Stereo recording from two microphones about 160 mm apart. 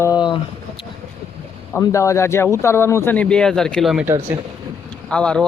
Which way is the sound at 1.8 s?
20° left (ahead or behind).